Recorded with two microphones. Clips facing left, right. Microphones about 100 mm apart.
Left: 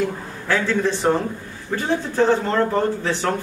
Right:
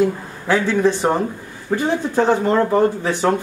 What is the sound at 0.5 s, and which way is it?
Speech, 15° right (ahead or behind).